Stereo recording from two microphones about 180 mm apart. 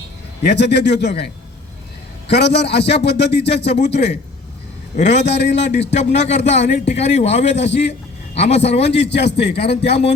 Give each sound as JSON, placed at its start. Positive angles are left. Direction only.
{"t": 0.4, "sound": "a man's voice", "side_deg": 70}
{"t": 2.3, "sound": "a man's voice", "side_deg": 70}
{"t": 5.9, "sound": "a man's voice", "side_deg": 40}
{"t": 7.4, "sound": "a man's voice", "side_deg": 75}
{"t": 8.4, "sound": "a man's voice", "side_deg": 35}
{"t": 8.8, "sound": "a man's voice", "side_deg": 75}
{"t": 9.6, "sound": "a man's voice", "side_deg": 35}